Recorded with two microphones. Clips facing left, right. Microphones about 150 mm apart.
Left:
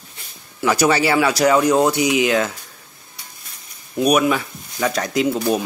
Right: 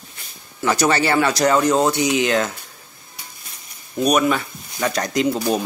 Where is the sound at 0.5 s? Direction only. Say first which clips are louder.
Left 2 dB; 5° left (ahead or behind).